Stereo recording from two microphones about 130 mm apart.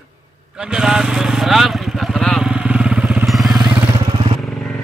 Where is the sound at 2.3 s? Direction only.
5° right (ahead or behind).